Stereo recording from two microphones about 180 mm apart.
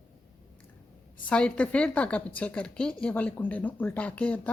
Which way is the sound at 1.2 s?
5° left (ahead or behind).